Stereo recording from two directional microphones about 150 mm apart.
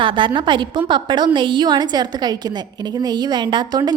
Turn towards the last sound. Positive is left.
turn(degrees=-30)  # may be behind; listen again after turning